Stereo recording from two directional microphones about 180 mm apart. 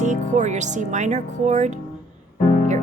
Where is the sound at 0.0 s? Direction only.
40° right (ahead or behind).